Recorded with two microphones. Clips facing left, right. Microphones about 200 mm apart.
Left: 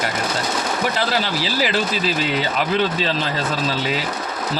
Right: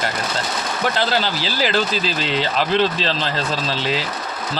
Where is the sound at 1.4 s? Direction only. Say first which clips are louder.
Even; 5° left (ahead or behind).